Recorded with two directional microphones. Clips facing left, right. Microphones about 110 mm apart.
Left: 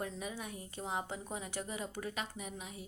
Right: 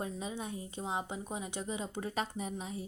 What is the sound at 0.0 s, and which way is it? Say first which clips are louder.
A woman's voice: right 2 dB; 25° right (ahead or behind).